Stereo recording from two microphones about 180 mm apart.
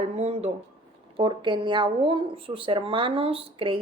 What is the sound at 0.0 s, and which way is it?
Speech, 35° right (ahead or behind).